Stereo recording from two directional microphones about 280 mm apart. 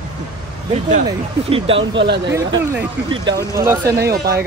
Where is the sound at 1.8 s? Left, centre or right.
Right.